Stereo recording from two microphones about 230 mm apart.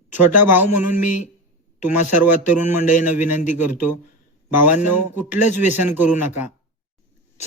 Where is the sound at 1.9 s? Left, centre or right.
Left.